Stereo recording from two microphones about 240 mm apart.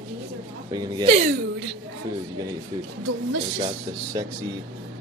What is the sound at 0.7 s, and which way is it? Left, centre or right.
Speech, centre.